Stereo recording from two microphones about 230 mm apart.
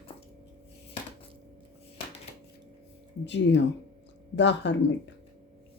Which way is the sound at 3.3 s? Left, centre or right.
Left.